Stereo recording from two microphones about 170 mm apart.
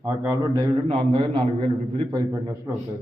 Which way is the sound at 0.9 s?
30° right (ahead or behind).